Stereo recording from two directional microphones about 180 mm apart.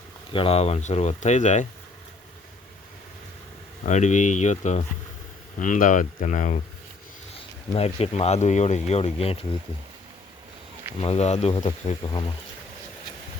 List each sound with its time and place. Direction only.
0.3 s speech: 35° left (ahead or behind)
3.8 s speech: 40° left (ahead or behind)
7.7 s speech: 35° left (ahead or behind)
11.0 s speech: 35° left (ahead or behind)